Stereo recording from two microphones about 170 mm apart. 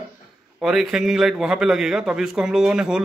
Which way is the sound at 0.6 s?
Centre (ahead or behind).